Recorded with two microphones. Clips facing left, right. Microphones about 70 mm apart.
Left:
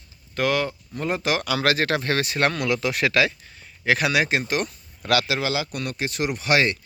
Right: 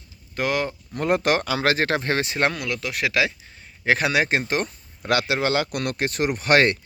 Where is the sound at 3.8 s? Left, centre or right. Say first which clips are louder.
Right 1 dB; right.